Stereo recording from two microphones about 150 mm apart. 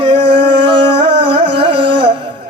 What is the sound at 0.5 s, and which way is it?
Music, 35° right (ahead or behind).